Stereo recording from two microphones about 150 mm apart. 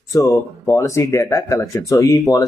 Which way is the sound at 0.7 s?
20° left (ahead or behind).